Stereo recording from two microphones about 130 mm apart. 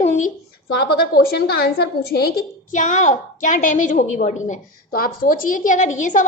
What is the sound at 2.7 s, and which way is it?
A woman's voice, 70° left (ahead or behind).